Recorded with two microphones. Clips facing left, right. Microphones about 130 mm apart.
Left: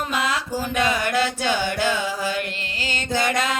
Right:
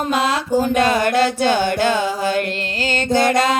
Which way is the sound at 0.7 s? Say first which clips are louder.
Right 3 dB; 50° right (ahead or behind).